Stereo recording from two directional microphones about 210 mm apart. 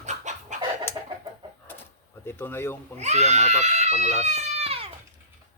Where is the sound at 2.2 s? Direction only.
10° left (ahead or behind).